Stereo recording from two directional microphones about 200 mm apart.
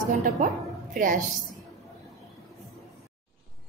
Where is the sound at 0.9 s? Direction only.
40° right (ahead or behind).